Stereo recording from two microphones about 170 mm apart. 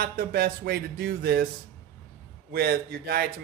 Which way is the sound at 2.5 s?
65° right (ahead or behind).